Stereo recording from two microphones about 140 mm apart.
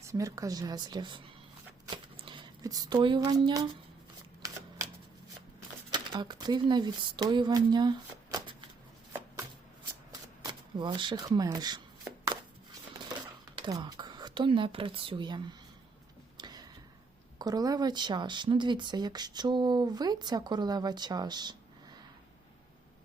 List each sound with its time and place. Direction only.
0.0 s a woman's voice: 25° right (ahead or behind)
5.9 s speech: 30° right (ahead or behind)
10.1 s shuffling cards: 30° right (ahead or behind)
11.5 s a woman's voice: 30° right (ahead or behind)
13.6 s speech: 30° right (ahead or behind)
16.4 s tick-tock: 30° right (ahead or behind)
17.3 s speech: 30° right (ahead or behind)